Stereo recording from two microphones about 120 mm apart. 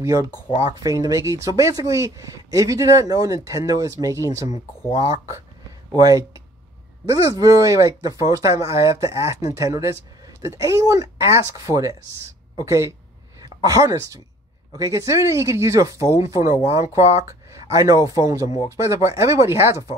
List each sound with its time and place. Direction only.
0.0 s speech: 30° right (ahead or behind)
5.9 s speech: 30° right (ahead or behind)